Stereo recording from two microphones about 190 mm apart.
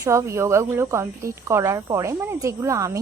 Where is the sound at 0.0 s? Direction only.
15° right (ahead or behind).